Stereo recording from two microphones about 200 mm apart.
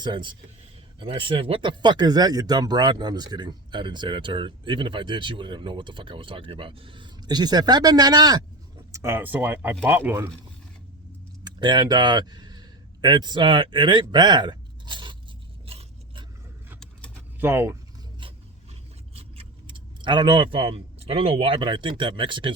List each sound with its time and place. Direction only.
0.0 s speech: 25° right (ahead or behind)
11.4 s speech: 20° right (ahead or behind)
15.6 s a sound: 30° right (ahead or behind)
17.4 s speech: 10° right (ahead or behind)
19.1 s speech: 25° right (ahead or behind)